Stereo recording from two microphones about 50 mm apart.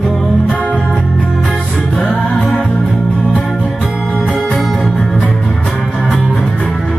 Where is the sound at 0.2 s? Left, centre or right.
Centre.